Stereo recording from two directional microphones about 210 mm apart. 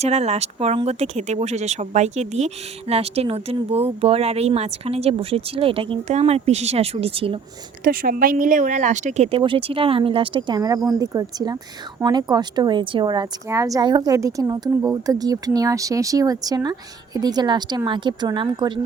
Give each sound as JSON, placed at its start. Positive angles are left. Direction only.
{"t": 0.0, "sound": "speech", "side_deg": -30}
{"t": 7.9, "sound": "a woman's voice", "side_deg": -40}